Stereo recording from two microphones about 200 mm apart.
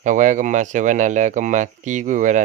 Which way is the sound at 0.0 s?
40° right (ahead or behind).